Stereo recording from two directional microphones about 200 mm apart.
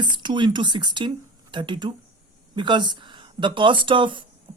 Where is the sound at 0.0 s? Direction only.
25° right (ahead or behind).